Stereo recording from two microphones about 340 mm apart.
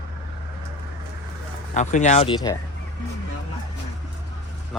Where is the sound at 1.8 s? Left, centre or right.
Left.